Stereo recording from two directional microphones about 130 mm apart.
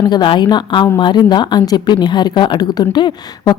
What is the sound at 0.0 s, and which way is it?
Speech, 35° left (ahead or behind).